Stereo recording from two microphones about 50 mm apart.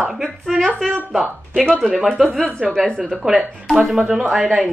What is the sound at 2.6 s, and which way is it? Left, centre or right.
Speech, right.